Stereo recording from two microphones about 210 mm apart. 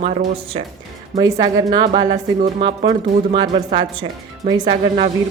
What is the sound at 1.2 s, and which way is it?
Speech, 20° right (ahead or behind).